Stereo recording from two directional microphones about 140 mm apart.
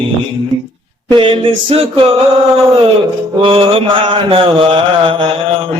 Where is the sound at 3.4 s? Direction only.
45° right (ahead or behind).